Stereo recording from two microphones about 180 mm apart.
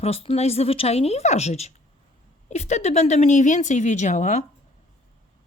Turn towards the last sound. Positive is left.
turn(degrees=40)  # may be behind; listen again after turning